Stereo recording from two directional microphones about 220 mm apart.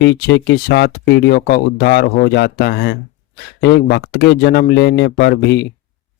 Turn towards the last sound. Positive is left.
turn(degrees=50)  # may be behind; listen again after turning